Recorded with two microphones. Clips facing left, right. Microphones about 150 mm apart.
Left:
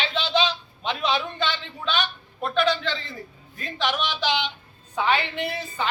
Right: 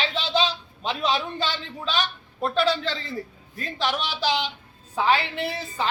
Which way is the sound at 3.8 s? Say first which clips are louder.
Left 1 dB; 35° right (ahead or behind).